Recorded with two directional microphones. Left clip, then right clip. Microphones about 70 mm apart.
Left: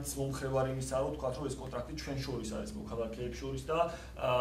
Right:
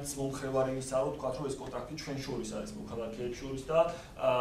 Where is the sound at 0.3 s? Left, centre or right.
Right.